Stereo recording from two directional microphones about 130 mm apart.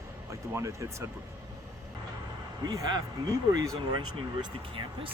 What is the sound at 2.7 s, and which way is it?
Speech, 30° right (ahead or behind).